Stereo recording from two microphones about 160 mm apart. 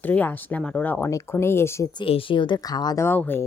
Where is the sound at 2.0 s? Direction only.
35° left (ahead or behind); by 3.4 s 15° left (ahead or behind).